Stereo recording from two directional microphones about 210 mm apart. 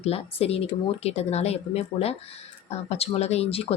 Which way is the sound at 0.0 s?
30° left (ahead or behind).